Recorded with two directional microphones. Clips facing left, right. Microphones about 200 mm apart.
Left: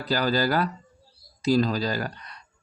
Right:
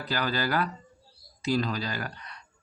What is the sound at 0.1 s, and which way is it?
Speech, 35° left (ahead or behind).